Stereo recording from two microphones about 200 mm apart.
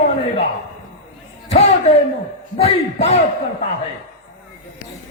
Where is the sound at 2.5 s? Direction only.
30° left (ahead or behind).